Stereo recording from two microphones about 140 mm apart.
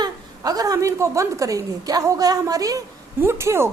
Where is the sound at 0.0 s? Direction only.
25° right (ahead or behind).